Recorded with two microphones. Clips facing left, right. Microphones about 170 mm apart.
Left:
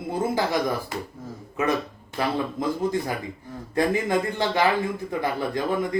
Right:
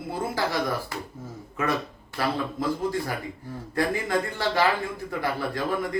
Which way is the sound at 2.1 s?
20° left (ahead or behind).